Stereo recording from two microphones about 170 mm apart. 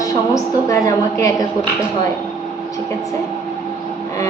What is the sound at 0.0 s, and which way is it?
A woman's voice, 20° left (ahead or behind).